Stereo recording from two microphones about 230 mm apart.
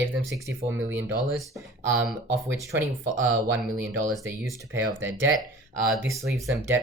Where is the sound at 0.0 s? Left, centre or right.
Centre.